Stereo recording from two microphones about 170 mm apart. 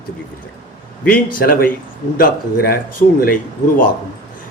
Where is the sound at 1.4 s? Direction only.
60° left (ahead or behind).